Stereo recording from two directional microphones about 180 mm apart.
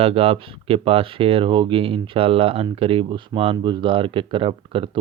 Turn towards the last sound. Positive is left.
turn(degrees=-30)  # may be behind; listen again after turning